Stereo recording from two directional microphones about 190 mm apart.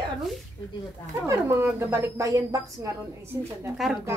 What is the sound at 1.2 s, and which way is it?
A woman's voice, 15° right (ahead or behind).